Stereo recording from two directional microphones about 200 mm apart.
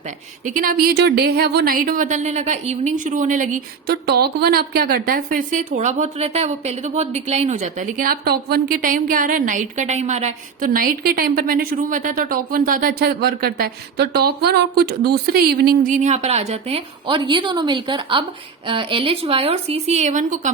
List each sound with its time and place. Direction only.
0.4 s speech: 45° right (ahead or behind)
16.0 s a woman's voice: 35° right (ahead or behind)